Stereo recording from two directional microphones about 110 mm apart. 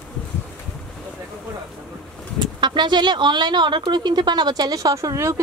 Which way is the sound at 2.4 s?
45° right (ahead or behind).